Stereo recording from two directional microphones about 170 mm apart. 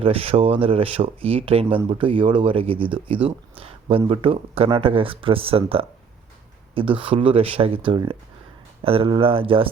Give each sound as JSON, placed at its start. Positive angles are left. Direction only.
{"t": 0.0, "sound": "speech", "side_deg": -35}